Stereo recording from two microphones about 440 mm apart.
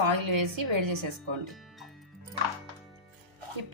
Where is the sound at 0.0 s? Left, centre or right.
Right.